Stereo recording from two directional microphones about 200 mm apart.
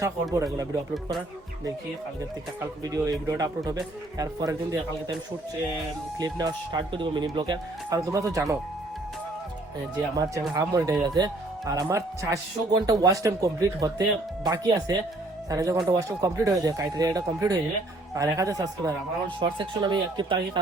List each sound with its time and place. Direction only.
0.3 s speech: 20° right (ahead or behind)
2.6 s speech: 15° right (ahead or behind)
6.1 s speech: 20° right (ahead or behind)
10.2 s speech: 15° right (ahead or behind)